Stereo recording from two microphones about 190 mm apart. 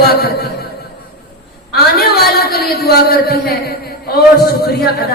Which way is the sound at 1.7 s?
55° left (ahead or behind).